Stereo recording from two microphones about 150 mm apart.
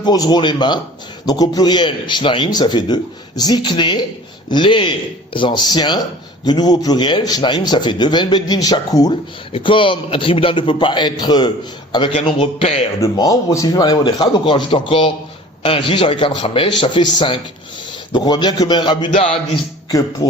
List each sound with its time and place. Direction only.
0.0 s a man's voice: 25° left (ahead or behind)
9.5 s a man's voice: 35° left (ahead or behind)
13.0 s a man's voice: 25° left (ahead or behind); by 19.4 s 40° left (ahead or behind)